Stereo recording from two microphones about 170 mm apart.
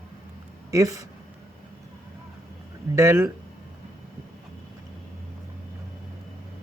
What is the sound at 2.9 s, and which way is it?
Speech, 15° right (ahead or behind).